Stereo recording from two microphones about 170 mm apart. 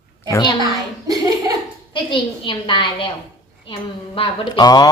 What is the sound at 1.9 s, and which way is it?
Speech, 30° left (ahead or behind).